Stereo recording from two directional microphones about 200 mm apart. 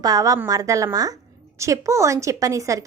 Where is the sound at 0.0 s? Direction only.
15° right (ahead or behind).